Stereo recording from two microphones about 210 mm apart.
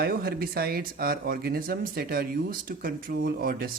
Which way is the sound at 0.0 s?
45° right (ahead or behind).